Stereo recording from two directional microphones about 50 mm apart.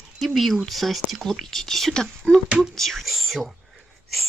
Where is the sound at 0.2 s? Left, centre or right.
Centre.